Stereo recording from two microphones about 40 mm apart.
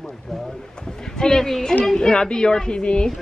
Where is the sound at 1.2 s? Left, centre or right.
Centre.